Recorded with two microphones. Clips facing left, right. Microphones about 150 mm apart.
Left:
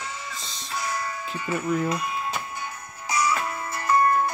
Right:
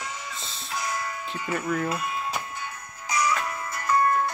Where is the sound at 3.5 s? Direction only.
20° left (ahead or behind).